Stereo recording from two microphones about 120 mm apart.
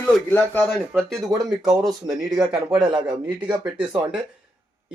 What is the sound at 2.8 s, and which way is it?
Speech, 40° right (ahead or behind).